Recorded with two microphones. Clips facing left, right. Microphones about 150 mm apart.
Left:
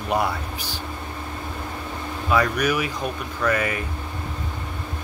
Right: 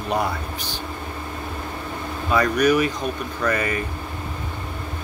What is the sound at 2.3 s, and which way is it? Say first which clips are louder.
Speech: right 3 dB; 5° left (ahead or behind).